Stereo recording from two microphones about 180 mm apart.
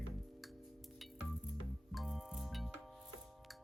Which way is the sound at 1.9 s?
Centre (ahead or behind).